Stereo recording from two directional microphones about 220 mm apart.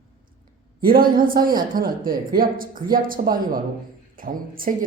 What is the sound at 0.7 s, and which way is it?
Speech, 40° right (ahead or behind).